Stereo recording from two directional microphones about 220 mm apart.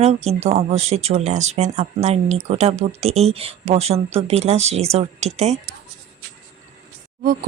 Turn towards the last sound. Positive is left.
turn(degrees=-40)  # may be behind; listen again after turning